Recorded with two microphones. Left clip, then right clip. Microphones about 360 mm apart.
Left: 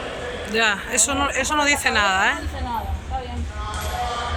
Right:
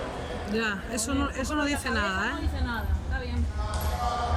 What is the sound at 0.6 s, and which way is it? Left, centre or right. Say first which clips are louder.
Speech: left 11 dB; centre.